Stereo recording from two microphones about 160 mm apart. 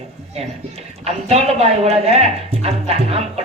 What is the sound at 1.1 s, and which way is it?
A woman's voice, 40° right (ahead or behind).